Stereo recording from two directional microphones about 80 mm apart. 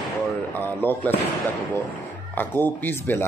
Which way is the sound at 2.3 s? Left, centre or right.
Left.